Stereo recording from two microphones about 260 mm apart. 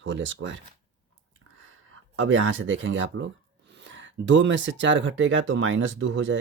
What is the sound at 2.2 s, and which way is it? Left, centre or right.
Speech, right.